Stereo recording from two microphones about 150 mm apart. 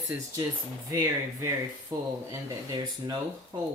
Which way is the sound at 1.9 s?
20° right (ahead or behind).